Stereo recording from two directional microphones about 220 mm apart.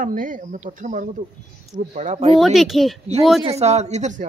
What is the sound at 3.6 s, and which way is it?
Speech, 30° right (ahead or behind).